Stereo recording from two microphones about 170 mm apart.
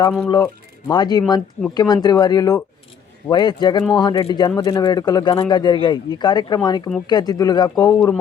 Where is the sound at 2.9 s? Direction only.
25° left (ahead or behind).